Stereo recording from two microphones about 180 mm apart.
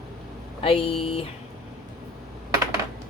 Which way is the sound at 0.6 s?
30° left (ahead or behind).